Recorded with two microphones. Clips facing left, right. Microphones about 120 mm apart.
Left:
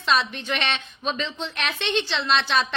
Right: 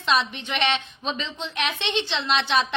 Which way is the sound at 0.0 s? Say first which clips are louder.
Even; 20° right (ahead or behind).